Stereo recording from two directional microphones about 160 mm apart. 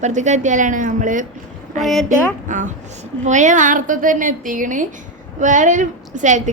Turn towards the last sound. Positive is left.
turn(degrees=-50)  # may be behind; listen again after turning